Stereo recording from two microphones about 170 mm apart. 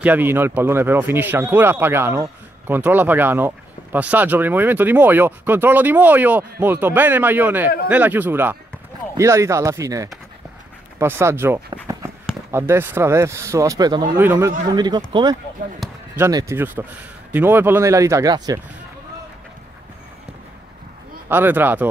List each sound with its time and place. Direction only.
0.0 s speech: 10° right (ahead or behind)
14.1 s speech: 10° right (ahead or behind)
16.2 s speech: 20° right (ahead or behind)
21.3 s speech: 10° right (ahead or behind)